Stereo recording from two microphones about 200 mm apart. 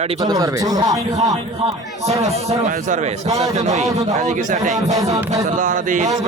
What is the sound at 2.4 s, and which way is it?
Speech, 35° right (ahead or behind).